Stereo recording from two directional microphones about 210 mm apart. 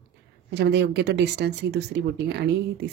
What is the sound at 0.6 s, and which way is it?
Speech, 55° right (ahead or behind).